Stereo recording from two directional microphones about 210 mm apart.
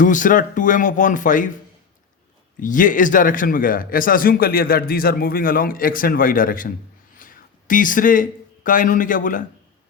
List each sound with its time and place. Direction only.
0.0 s a man's voice: 40° left (ahead or behind)
2.6 s a man's voice: 40° left (ahead or behind)